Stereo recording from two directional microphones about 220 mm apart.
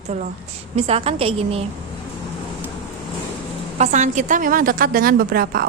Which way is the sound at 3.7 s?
30° right (ahead or behind).